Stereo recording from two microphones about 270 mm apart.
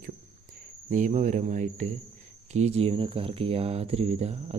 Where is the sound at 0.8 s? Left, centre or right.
Right.